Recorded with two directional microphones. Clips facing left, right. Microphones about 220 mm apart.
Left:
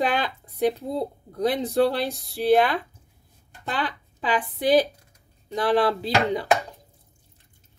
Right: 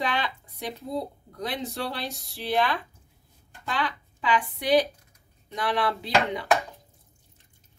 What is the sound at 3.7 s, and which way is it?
Speech, 35° left (ahead or behind).